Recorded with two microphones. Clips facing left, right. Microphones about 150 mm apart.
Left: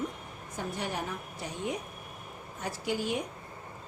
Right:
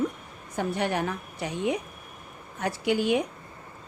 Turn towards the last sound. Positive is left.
turn(degrees=-75)  # may be behind; listen again after turning